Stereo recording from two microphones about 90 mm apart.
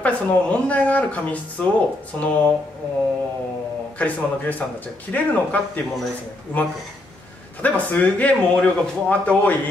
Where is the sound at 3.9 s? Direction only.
15° left (ahead or behind).